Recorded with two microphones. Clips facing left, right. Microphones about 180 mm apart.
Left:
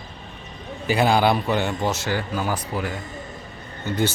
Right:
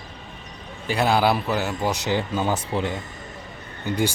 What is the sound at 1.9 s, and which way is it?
Speech, 20° right (ahead or behind).